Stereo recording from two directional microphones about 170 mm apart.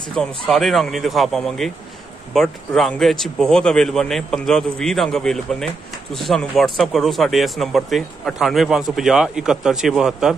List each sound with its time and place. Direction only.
0.1 s speech: centre (ahead or behind)